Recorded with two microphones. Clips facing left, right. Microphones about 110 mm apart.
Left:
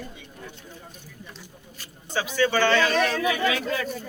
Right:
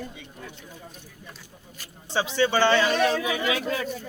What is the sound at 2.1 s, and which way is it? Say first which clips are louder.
A man's voice: even; 25° right (ahead or behind).